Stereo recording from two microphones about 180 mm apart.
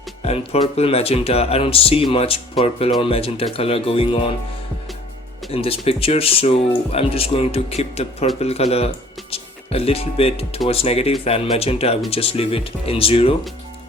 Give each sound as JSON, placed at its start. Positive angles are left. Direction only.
{"t": 0.3, "sound": "speech", "side_deg": 35}
{"t": 5.5, "sound": "speech", "side_deg": 30}